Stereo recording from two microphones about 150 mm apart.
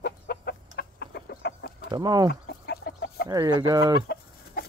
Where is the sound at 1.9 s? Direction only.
25° right (ahead or behind).